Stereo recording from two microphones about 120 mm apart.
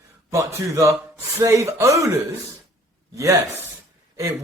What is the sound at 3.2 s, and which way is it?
Speech, 20° right (ahead or behind).